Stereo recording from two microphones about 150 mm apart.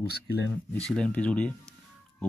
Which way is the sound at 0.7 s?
5° left (ahead or behind).